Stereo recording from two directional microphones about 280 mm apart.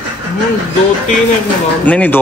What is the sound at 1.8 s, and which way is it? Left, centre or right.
Speech, centre.